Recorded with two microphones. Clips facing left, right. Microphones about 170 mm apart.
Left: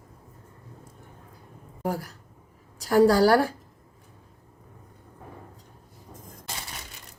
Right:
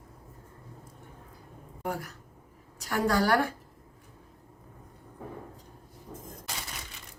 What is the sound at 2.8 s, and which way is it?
Speech, 35° left (ahead or behind).